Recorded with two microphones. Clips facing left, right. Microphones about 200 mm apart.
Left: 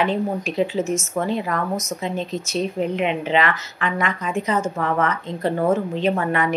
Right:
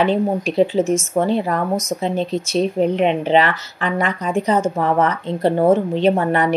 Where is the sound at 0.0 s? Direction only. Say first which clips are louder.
Right 4 dB; 30° right (ahead or behind).